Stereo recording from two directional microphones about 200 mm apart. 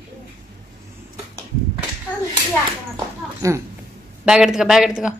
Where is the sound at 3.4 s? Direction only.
15° right (ahead or behind).